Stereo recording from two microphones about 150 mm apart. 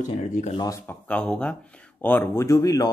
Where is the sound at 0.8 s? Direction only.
10° left (ahead or behind).